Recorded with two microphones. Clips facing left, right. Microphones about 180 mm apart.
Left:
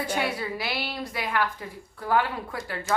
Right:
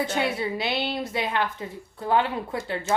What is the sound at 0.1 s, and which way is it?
A woman's voice, 25° right (ahead or behind).